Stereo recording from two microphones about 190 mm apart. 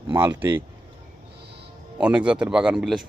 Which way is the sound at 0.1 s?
10° right (ahead or behind).